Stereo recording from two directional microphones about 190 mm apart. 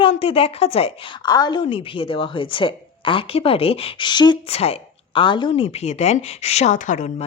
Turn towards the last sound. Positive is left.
turn(degrees=40)  # may be behind; listen again after turning